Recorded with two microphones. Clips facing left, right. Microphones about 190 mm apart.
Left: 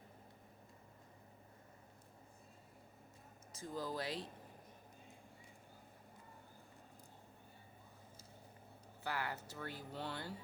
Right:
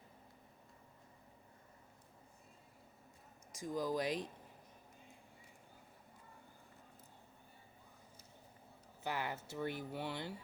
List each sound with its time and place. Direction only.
3.5 s speech: 15° right (ahead or behind)
9.0 s speech: 20° right (ahead or behind)